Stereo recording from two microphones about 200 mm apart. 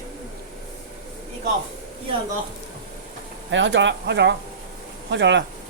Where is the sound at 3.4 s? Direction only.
65° right (ahead or behind).